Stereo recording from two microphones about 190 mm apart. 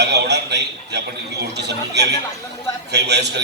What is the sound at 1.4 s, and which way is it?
A man's voice, 65° right (ahead or behind).